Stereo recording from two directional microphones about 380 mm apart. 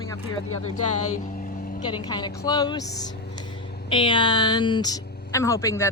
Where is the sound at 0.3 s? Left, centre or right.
Left.